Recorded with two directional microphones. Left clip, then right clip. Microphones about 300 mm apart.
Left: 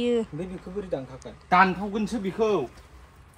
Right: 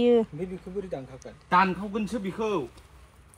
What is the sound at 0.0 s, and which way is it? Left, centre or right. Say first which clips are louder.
Speech: right 4 dB; centre.